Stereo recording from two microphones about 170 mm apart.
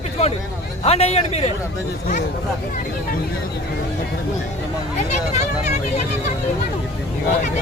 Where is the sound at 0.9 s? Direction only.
40° left (ahead or behind).